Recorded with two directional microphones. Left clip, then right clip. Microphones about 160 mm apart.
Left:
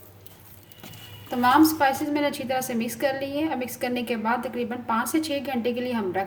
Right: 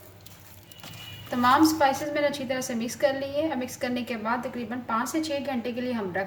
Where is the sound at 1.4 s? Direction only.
50° left (ahead or behind).